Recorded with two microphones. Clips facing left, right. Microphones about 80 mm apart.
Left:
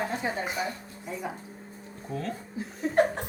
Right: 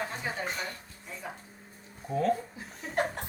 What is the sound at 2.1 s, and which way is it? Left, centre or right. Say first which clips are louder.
Speech: right 7 dB; centre.